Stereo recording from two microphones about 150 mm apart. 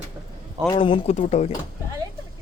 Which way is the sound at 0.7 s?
35° left (ahead or behind).